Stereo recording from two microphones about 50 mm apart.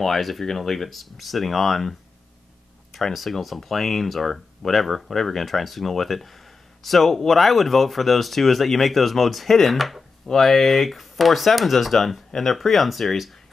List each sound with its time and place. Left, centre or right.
0.0 s speech: centre